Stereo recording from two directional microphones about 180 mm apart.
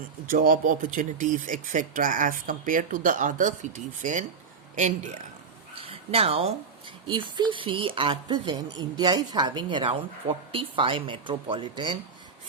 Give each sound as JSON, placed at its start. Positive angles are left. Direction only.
{"t": 0.3, "sound": "speech", "side_deg": -50}
{"t": 5.7, "sound": "a sound", "side_deg": -30}
{"t": 7.1, "sound": "a woman's voice", "side_deg": -25}